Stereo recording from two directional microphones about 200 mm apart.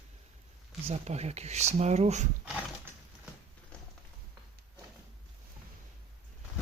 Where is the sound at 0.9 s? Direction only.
35° right (ahead or behind).